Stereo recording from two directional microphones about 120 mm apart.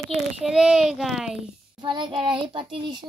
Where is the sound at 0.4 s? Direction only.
5° right (ahead or behind).